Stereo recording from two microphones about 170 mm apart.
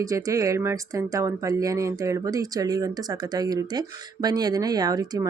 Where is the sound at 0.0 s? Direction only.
20° right (ahead or behind).